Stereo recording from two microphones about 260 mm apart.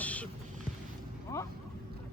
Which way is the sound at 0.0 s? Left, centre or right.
Centre.